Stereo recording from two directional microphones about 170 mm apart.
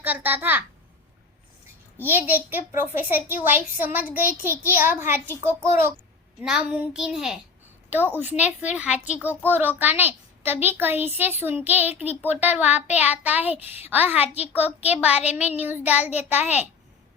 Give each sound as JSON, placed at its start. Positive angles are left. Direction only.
{"t": 0.0, "sound": "a child's voice", "side_deg": -10}
{"t": 2.0, "sound": "a child's voice", "side_deg": -10}
{"t": 6.4, "sound": "a child's voice", "side_deg": -5}
{"t": 14.8, "sound": "speech", "side_deg": 35}
{"t": 15.4, "sound": "a child's voice", "side_deg": -10}